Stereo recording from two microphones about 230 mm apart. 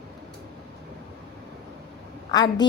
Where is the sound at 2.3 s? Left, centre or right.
Centre.